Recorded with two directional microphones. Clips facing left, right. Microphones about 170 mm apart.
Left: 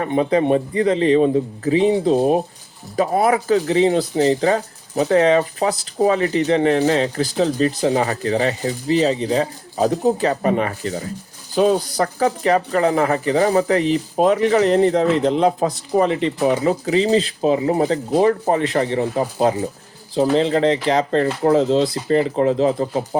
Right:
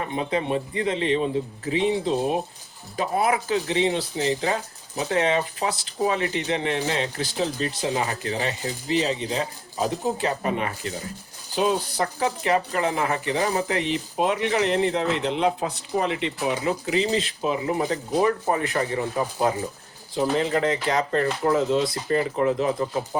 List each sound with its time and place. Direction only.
0.0 s speech: 45° left (ahead or behind)